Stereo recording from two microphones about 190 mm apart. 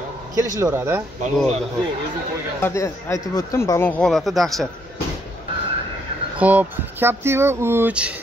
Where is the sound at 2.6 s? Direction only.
15° left (ahead or behind).